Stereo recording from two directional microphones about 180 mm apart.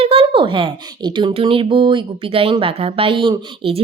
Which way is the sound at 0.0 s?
30° right (ahead or behind).